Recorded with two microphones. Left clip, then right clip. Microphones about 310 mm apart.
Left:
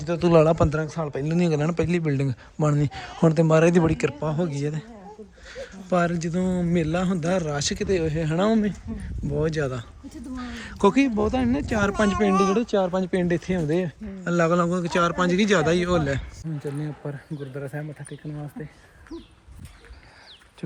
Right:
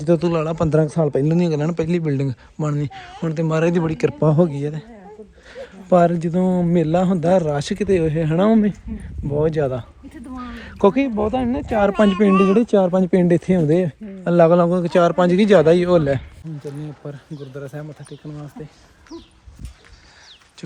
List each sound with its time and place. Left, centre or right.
0.2 s speech: centre
0.7 s a man's voice: centre
1.4 s a man's voice: centre
10.5 s a man's voice: centre
11.9 s speech: centre
14.3 s a man's voice: centre
19.1 s a man's voice: centre